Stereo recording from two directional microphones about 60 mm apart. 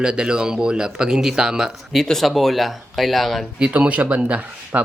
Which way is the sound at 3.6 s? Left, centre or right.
Right.